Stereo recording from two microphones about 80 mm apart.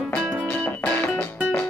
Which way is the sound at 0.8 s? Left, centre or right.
Left.